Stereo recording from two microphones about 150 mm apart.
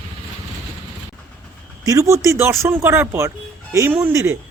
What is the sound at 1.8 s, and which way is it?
Speech, 20° right (ahead or behind).